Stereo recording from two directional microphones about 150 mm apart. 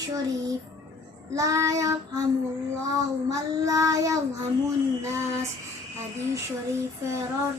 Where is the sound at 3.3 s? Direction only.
20° right (ahead or behind).